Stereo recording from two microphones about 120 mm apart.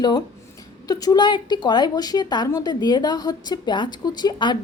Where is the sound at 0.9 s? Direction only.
30° left (ahead or behind).